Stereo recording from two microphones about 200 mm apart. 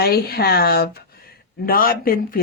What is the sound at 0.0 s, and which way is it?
Speech, 55° left (ahead or behind).